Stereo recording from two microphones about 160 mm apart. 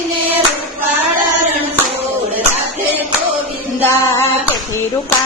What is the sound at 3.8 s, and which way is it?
Female singing, 15° left (ahead or behind).